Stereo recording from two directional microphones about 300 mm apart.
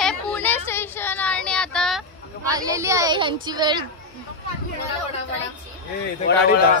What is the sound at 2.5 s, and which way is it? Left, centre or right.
A woman's voice, centre.